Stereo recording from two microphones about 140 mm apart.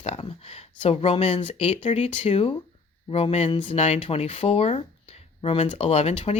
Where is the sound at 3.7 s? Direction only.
55° left (ahead or behind).